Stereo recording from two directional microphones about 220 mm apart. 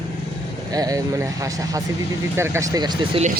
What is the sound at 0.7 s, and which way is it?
Speech, 15° right (ahead or behind).